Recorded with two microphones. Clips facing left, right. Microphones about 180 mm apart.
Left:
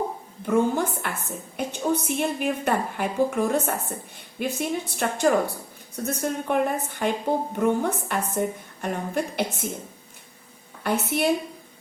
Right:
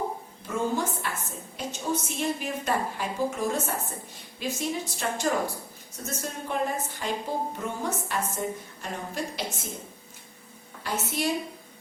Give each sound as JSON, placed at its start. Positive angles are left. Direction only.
{"t": 0.4, "sound": "a woman's voice", "side_deg": 60}
{"t": 10.8, "sound": "a woman's voice", "side_deg": 60}